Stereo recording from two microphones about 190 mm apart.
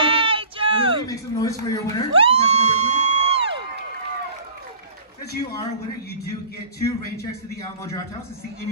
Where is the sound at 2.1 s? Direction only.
30° right (ahead or behind).